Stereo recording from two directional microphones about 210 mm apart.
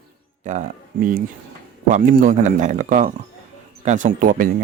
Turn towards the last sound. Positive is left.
turn(degrees=-40)  # may be behind; listen again after turning